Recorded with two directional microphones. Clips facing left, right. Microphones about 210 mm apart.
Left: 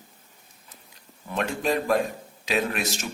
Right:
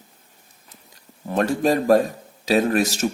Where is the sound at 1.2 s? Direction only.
40° right (ahead or behind).